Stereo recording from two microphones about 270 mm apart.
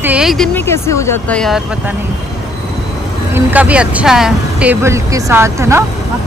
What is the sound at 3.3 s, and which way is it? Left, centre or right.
Speech, centre.